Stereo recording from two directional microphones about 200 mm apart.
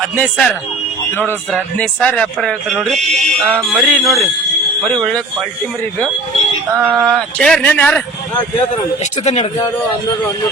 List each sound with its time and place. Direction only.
0.2 s speech: 5° left (ahead or behind)
2.0 s speech: 5° left (ahead or behind)
6.7 s speech: 10° right (ahead or behind)
9.2 s speech: 30° left (ahead or behind)